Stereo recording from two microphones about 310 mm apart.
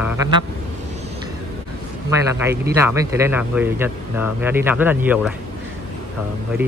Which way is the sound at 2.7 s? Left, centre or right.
Centre.